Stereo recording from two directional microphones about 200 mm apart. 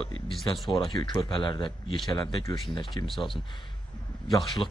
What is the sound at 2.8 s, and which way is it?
Speech, centre (ahead or behind).